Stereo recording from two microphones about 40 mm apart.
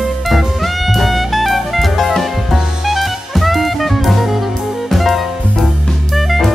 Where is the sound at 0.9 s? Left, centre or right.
Centre.